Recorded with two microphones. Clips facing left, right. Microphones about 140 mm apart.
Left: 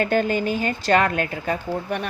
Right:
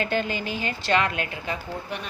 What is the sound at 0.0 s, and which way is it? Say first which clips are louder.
A woman's voice: left 6 dB; 45° left (ahead or behind).